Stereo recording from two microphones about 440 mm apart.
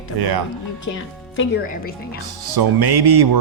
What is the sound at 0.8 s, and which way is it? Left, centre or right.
A woman's voice, left.